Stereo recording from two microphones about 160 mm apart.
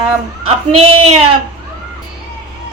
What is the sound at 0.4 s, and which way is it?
Speech, 35° right (ahead or behind).